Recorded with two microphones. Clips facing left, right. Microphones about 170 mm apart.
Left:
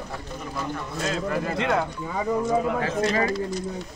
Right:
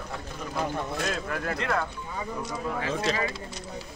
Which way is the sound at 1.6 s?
20° left (ahead or behind).